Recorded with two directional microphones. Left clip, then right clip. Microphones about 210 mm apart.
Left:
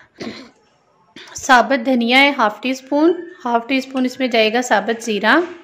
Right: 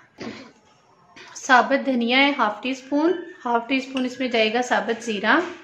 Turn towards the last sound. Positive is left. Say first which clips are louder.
# left 5 dB
turn(degrees=45)  # may be behind; listen again after turning